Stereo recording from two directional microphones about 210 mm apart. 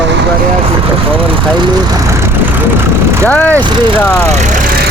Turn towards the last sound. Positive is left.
turn(degrees=5)  # may be behind; listen again after turning